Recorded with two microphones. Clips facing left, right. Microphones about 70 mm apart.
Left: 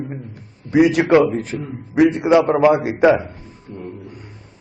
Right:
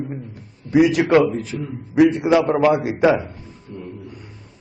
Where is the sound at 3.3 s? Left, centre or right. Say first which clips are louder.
Left 1 dB; left.